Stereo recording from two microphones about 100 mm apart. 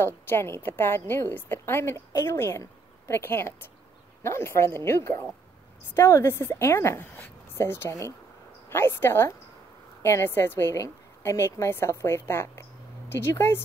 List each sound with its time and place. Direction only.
0.0 s a woman's voice: 25° left (ahead or behind)